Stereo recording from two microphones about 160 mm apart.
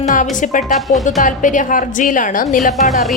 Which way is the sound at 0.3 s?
50° left (ahead or behind).